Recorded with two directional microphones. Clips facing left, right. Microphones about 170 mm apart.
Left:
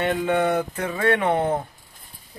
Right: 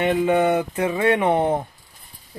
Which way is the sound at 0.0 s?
10° right (ahead or behind).